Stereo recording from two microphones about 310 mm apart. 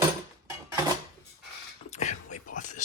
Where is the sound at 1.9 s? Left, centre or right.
Left.